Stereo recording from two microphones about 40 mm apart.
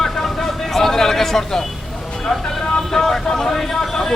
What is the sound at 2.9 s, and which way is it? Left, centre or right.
Speech, centre.